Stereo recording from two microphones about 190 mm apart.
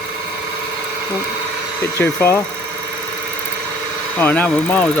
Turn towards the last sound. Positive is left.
turn(degrees=5)  # may be behind; listen again after turning